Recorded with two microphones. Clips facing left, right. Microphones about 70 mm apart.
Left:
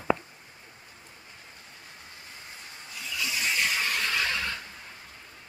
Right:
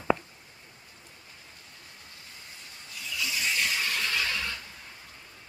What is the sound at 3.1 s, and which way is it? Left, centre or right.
Squeal, left.